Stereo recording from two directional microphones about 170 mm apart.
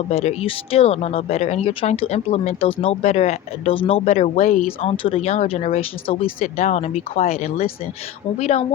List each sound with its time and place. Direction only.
0.1 s speech: 35° left (ahead or behind)